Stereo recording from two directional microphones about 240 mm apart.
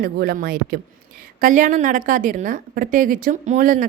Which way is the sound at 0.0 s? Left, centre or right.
Right.